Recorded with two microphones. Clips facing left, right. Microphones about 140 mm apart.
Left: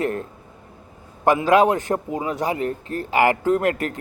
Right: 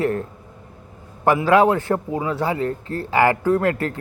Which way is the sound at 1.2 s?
20° left (ahead or behind).